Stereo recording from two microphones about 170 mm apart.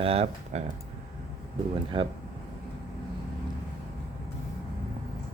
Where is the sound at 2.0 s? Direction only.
30° right (ahead or behind).